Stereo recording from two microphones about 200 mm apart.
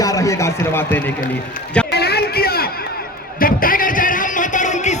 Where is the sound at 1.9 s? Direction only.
55° left (ahead or behind).